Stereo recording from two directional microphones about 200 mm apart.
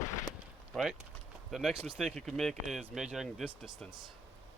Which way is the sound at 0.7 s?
Centre (ahead or behind).